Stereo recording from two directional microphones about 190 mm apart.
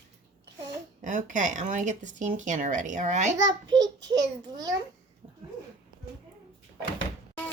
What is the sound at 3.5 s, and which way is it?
Speech, 20° right (ahead or behind).